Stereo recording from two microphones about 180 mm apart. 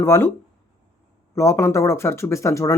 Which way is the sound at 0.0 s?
15° left (ahead or behind).